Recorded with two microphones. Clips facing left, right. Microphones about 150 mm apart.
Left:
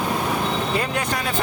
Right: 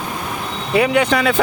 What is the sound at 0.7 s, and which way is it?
Speech, 80° right.